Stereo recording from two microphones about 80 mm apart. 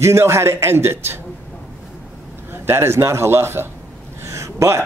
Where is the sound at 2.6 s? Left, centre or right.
Right.